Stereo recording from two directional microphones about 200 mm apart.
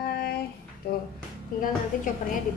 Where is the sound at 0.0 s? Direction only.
50° left (ahead or behind).